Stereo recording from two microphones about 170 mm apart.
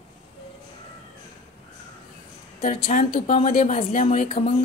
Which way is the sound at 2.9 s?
45° left (ahead or behind).